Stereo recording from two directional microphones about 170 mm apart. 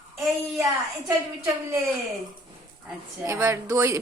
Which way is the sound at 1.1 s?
15° right (ahead or behind).